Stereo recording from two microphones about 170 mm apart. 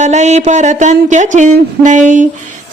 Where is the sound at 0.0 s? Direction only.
40° right (ahead or behind).